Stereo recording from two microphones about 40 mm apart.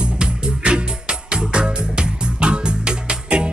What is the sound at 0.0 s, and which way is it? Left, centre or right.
Music, right.